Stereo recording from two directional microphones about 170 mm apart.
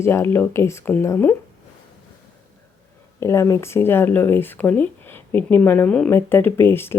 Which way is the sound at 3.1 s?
15° left (ahead or behind).